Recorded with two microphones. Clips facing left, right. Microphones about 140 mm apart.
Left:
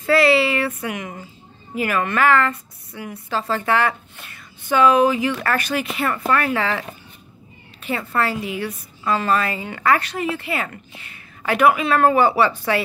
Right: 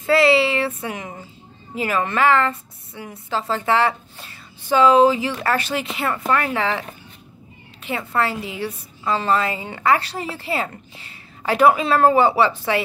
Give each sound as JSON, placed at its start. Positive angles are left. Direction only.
{"t": 0.0, "sound": "a sound", "side_deg": -25}
{"t": 1.8, "sound": "a woman's voice", "side_deg": -25}
{"t": 7.8, "sound": "a woman's voice", "side_deg": -20}